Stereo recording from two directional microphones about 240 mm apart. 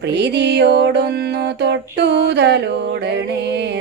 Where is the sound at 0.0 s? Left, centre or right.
Right.